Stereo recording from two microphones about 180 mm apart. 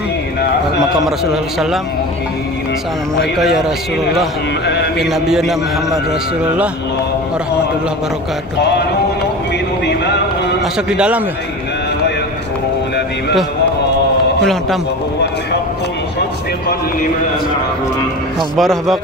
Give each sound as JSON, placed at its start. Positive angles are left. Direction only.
{"t": 1.0, "sound": "a man's voice", "side_deg": 0}
{"t": 3.2, "sound": "a man's voice", "side_deg": 0}
{"t": 8.5, "sound": "speech", "side_deg": 70}
{"t": 10.6, "sound": "a man's voice", "side_deg": -5}
{"t": 14.4, "sound": "a man's voice", "side_deg": 0}
{"t": 18.6, "sound": "a man's voice", "side_deg": 0}